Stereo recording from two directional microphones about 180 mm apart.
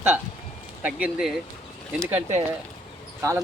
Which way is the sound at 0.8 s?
10° right (ahead or behind).